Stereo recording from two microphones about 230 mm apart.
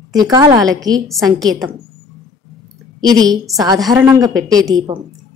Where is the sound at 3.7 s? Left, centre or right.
Centre.